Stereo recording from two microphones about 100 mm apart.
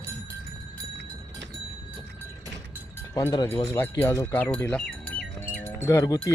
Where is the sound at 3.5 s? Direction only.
30° left (ahead or behind).